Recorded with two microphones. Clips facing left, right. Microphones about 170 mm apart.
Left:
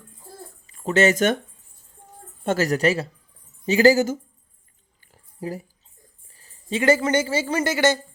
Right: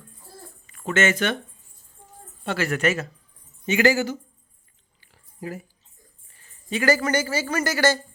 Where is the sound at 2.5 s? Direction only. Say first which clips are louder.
Left 3 dB; 40° left (ahead or behind).